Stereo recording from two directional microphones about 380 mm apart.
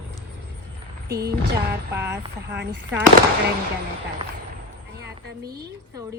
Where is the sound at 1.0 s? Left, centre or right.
Right.